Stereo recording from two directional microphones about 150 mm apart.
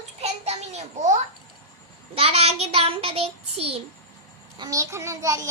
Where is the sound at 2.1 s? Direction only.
40° right (ahead or behind).